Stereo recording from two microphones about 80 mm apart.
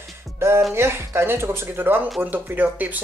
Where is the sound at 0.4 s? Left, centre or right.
Right.